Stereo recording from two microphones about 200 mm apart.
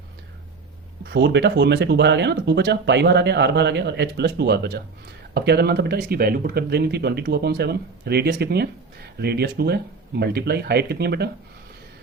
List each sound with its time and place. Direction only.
1.1 s speech: 60° right (ahead or behind)